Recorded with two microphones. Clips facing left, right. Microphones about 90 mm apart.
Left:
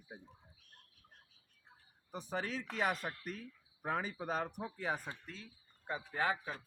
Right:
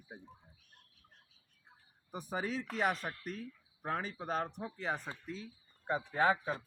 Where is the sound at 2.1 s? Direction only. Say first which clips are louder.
Right 2 dB; 10° right (ahead or behind); by 5.1 s 5° left (ahead or behind).